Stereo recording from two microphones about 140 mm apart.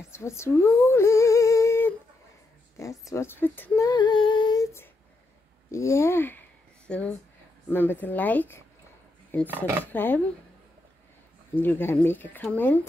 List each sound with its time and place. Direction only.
0.1 s speech: 20° left (ahead or behind)
3.8 s female singing: 30° left (ahead or behind)
5.7 s speech: 20° left (ahead or behind)
11.5 s speech: 15° left (ahead or behind)